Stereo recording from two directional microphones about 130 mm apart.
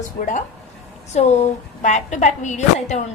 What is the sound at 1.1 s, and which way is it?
A woman's voice, 60° left (ahead or behind).